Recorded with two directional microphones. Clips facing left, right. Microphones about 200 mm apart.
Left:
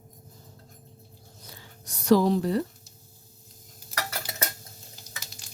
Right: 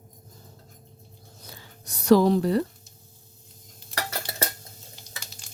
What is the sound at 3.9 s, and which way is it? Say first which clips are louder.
Cutlery: right 2 dB; 30° right (ahead or behind).